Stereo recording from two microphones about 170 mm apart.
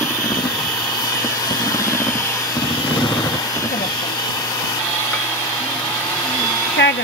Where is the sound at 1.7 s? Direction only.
15° left (ahead or behind).